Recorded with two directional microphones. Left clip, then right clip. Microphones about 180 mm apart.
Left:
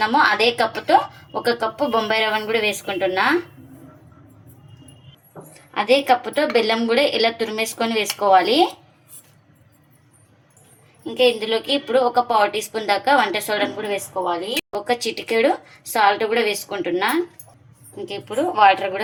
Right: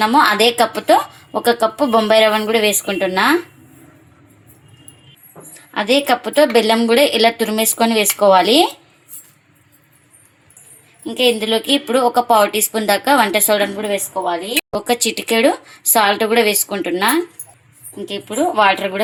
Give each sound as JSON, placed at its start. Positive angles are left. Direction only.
{"t": 0.0, "sound": "a woman's voice", "side_deg": -50}
{"t": 5.7, "sound": "a woman's voice", "side_deg": -45}
{"t": 11.0, "sound": "a woman's voice", "side_deg": -45}